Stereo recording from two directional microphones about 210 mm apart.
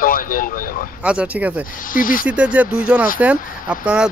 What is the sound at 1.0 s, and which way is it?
Speech, 5° right (ahead or behind).